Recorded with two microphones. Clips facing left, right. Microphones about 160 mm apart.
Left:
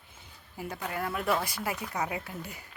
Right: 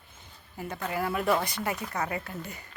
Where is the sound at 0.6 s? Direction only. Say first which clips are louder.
Right 3 dB; 5° left (ahead or behind).